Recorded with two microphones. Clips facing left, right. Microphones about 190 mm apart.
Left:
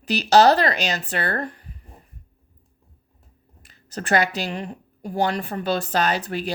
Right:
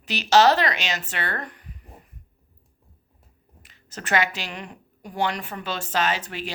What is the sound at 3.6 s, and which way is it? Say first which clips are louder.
A woman's voice: left 5 dB; 35° left (ahead or behind).